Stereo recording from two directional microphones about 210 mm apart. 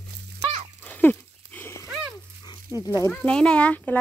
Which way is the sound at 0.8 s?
10° left (ahead or behind).